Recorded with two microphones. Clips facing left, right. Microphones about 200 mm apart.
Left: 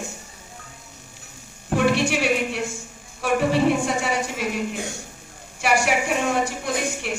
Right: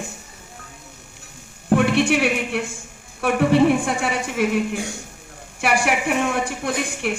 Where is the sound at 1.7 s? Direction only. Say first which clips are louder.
Right 3 dB; 60° right (ahead or behind).